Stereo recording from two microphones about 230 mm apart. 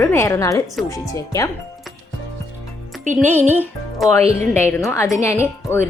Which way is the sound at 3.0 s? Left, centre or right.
Right.